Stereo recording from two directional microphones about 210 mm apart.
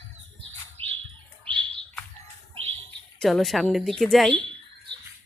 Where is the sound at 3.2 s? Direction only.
Centre (ahead or behind).